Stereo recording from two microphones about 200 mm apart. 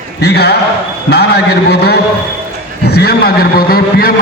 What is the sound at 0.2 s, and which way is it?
A man's voice, 55° left (ahead or behind).